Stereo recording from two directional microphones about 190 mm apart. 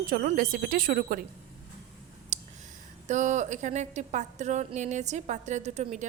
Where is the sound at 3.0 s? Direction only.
40° right (ahead or behind).